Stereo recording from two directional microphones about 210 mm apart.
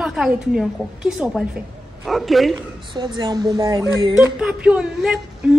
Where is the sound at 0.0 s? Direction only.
Centre (ahead or behind).